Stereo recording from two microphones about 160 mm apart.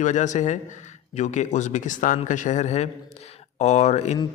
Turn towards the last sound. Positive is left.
turn(degrees=45)  # may be behind; listen again after turning